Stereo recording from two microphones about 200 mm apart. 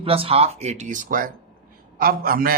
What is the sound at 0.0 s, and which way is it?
A man's voice, 30° right (ahead or behind).